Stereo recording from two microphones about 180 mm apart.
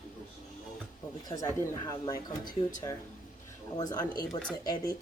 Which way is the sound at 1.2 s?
20° left (ahead or behind).